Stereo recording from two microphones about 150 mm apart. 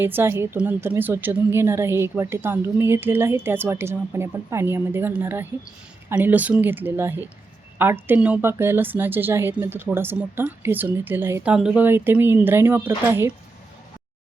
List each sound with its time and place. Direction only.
0.0 s a woman's voice: 15° right (ahead or behind)